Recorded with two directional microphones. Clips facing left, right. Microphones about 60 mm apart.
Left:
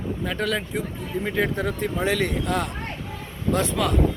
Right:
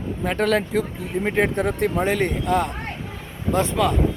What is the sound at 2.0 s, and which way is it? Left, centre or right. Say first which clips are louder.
Speech: right 2 dB; right.